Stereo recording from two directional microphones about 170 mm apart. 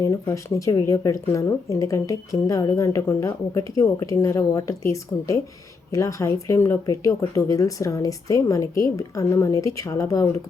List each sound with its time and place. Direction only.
0.0 s speech: 20° left (ahead or behind)